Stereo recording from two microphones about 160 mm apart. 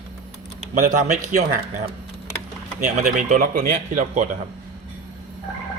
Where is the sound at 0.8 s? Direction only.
50° right (ahead or behind).